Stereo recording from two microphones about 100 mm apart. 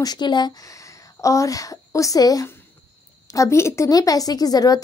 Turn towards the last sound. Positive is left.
turn(degrees=40)  # may be behind; listen again after turning